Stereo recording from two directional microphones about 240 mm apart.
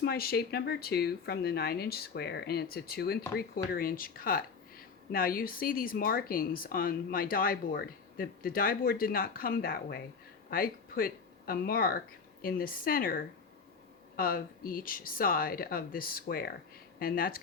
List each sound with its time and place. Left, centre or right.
0.0 s speech: left